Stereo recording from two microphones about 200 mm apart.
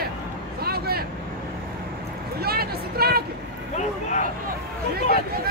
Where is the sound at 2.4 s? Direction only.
50° right (ahead or behind).